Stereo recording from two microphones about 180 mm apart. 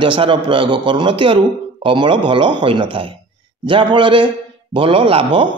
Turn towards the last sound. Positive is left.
turn(degrees=-30)  # may be behind; listen again after turning